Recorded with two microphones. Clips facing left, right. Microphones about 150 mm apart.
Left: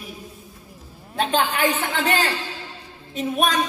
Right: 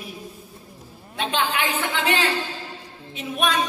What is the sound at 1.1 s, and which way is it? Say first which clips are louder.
Speech: left 3 dB; 40° left (ahead or behind).